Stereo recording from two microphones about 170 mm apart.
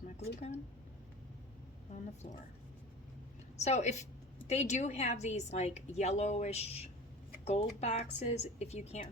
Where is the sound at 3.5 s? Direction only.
40° left (ahead or behind).